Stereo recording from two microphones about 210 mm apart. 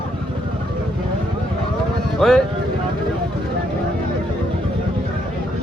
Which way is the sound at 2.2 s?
Centre (ahead or behind).